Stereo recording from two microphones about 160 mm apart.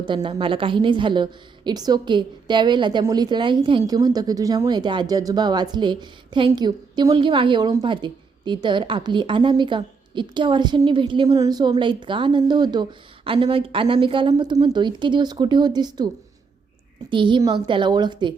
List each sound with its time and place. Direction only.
0.0 s a woman's voice: 30° right (ahead or behind)
17.1 s a woman's voice: 30° right (ahead or behind)